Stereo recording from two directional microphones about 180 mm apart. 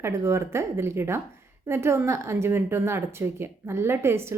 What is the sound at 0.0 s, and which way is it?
A woman's voice, 15° right (ahead or behind).